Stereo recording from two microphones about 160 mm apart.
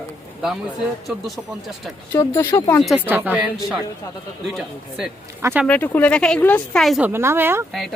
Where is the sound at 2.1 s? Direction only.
15° left (ahead or behind).